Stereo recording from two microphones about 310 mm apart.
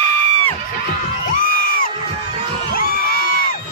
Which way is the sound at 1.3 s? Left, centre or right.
Left.